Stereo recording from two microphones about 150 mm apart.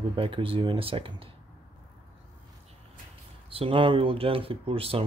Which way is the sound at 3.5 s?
35° right (ahead or behind).